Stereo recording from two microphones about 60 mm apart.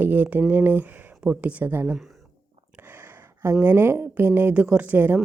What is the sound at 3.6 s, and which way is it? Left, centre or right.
Speech, right.